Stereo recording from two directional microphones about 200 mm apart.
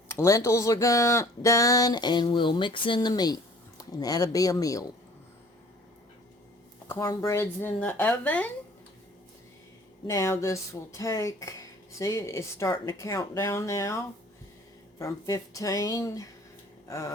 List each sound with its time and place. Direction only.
0.1 s speech: 15° left (ahead or behind)
6.8 s speech: 15° left (ahead or behind)
10.1 s speech: 15° left (ahead or behind)